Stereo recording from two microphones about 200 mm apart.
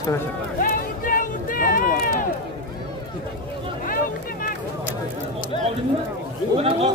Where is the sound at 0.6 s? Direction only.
45° left (ahead or behind).